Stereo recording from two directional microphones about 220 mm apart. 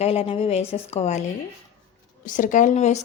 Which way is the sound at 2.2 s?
35° left (ahead or behind).